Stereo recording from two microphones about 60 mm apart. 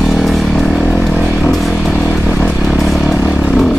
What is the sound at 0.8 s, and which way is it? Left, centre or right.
Vehicle, centre.